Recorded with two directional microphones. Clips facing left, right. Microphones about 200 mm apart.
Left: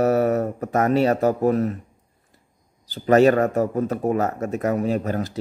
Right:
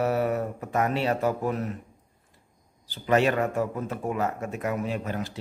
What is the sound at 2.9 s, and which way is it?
Speech, 40° left (ahead or behind).